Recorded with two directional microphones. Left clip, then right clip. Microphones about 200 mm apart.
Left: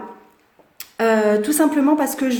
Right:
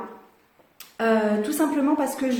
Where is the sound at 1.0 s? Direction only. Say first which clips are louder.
Left 5 dB; 50° left (ahead or behind).